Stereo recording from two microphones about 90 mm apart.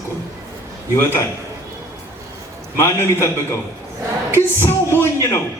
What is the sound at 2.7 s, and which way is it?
Speech, 25° left (ahead or behind).